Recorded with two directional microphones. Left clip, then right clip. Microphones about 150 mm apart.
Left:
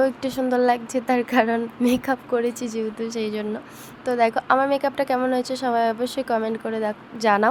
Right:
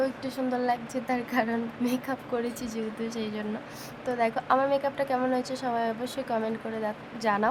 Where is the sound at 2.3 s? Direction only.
35° left (ahead or behind).